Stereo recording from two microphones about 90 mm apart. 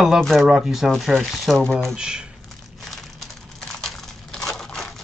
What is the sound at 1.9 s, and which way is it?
Speech, 10° right (ahead or behind).